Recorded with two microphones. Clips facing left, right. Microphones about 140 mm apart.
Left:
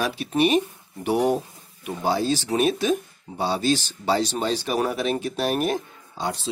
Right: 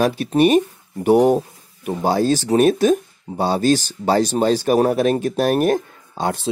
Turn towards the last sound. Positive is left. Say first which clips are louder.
# right 6 dB
turn(degrees=-55)  # may be behind; listen again after turning